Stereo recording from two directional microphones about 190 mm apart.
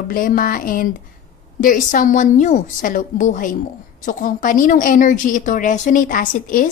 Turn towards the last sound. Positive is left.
turn(degrees=45)  # may be behind; listen again after turning